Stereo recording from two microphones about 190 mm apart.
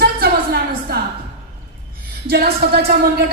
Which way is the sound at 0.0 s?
55° right (ahead or behind).